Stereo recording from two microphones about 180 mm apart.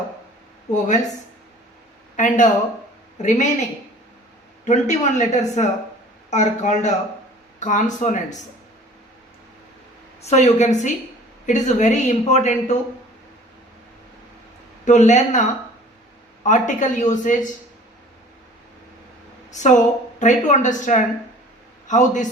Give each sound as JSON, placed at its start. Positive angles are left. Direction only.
{"t": 0.7, "sound": "speech", "side_deg": 40}
{"t": 2.1, "sound": "a woman's voice", "side_deg": 45}
{"t": 4.6, "sound": "a woman's voice", "side_deg": 40}
{"t": 10.2, "sound": "speech", "side_deg": 35}
{"t": 14.8, "sound": "a woman's voice", "side_deg": 40}
{"t": 19.5, "sound": "a woman's voice", "side_deg": 40}